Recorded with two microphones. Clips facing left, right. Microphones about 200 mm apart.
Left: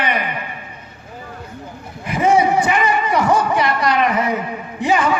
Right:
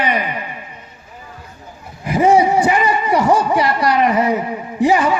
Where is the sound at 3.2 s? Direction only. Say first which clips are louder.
Right 2 dB; 35° right (ahead or behind).